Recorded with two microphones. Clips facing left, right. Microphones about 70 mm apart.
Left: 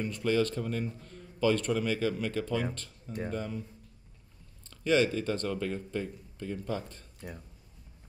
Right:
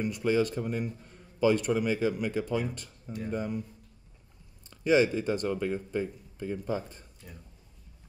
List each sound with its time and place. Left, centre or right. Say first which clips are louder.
0.0 s a man's voice: right 2 dB; centre
4.6 s a man's voice: right 2 dB; centre